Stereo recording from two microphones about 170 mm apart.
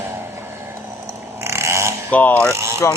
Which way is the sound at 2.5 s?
15° right (ahead or behind).